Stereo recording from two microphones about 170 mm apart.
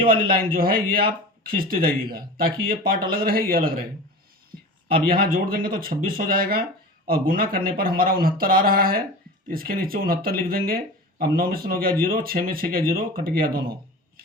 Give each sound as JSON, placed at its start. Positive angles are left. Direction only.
{"t": 0.0, "sound": "a man's voice", "side_deg": -30}
{"t": 0.3, "sound": "speech", "side_deg": -60}
{"t": 5.0, "sound": "speech", "side_deg": -60}